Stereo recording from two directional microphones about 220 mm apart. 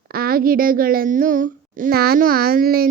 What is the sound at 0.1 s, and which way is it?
A child's voice, 45° right (ahead or behind).